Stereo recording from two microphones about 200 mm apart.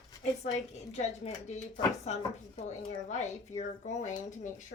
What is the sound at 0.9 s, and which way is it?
Speech, 35° left (ahead or behind).